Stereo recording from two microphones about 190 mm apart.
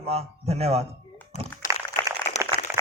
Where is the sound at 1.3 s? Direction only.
35° left (ahead or behind).